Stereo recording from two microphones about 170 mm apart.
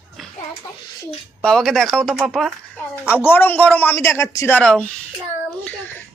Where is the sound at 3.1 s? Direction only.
10° left (ahead or behind).